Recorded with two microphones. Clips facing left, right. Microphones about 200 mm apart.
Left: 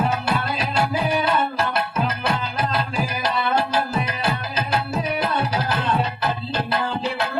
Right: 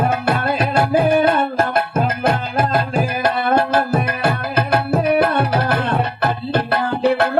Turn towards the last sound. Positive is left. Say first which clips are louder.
# right 8 dB
turn(degrees=-60)  # may be behind; listen again after turning